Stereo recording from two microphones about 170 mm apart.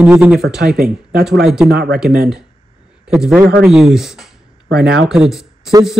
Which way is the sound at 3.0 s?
5° right (ahead or behind).